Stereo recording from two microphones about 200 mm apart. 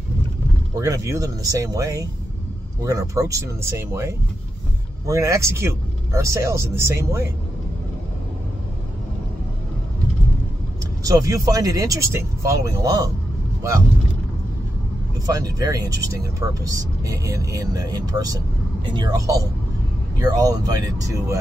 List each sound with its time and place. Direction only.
0.7 s speech: 15° right (ahead or behind)
11.1 s speech: 15° right (ahead or behind)
15.2 s speech: 20° right (ahead or behind)